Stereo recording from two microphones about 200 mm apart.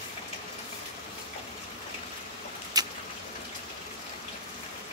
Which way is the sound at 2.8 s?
20° right (ahead or behind).